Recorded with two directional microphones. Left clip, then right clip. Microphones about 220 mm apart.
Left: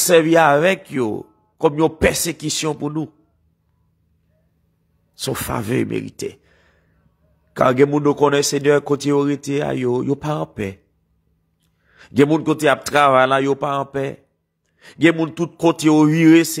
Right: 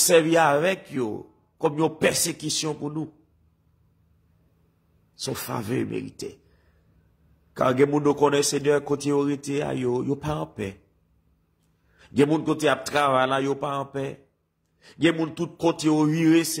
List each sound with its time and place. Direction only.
0.0 s a man's voice: 25° left (ahead or behind)
5.2 s a man's voice: 35° left (ahead or behind)
7.5 s a man's voice: 25° left (ahead or behind)
12.0 s a man's voice: 25° left (ahead or behind)